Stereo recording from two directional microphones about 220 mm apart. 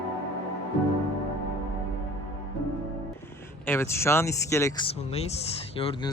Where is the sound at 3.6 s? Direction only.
10° left (ahead or behind); by 5.6 s 25° left (ahead or behind).